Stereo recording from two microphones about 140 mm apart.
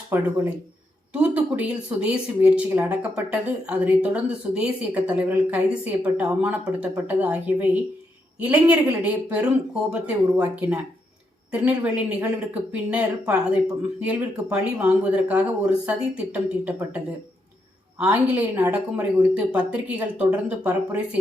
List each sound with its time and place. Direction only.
0.1 s speech: 20° right (ahead or behind)